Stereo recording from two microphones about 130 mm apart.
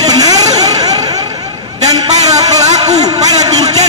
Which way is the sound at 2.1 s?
60° right (ahead or behind).